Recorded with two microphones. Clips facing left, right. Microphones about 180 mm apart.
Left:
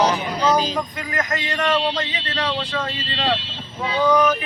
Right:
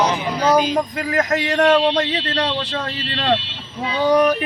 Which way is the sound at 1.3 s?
65° right (ahead or behind).